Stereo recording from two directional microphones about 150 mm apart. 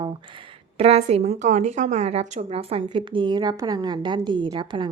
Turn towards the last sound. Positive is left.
turn(degrees=-30)  # may be behind; listen again after turning